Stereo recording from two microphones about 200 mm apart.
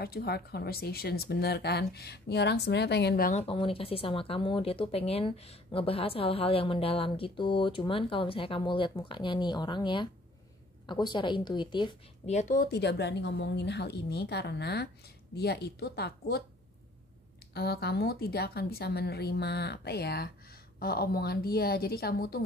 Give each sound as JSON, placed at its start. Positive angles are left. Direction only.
{"t": 0.0, "sound": "speech", "side_deg": 50}
{"t": 3.3, "sound": "speech", "side_deg": 30}
{"t": 12.4, "sound": "speech", "side_deg": 40}
{"t": 12.6, "sound": "a woman's voice", "side_deg": 55}
{"t": 17.6, "sound": "speech", "side_deg": 50}